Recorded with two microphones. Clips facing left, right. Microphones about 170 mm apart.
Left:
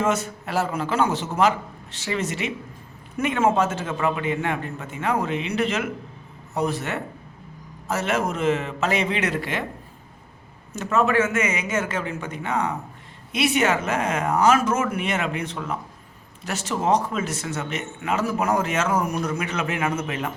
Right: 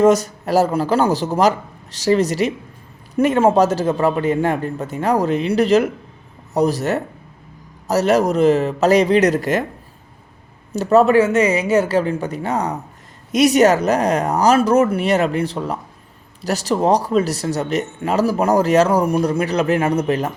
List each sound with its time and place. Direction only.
0.0 s a man's voice: 40° right (ahead or behind)
10.7 s a man's voice: 35° right (ahead or behind)